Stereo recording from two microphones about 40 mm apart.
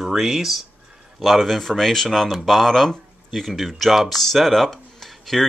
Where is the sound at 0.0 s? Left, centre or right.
Centre.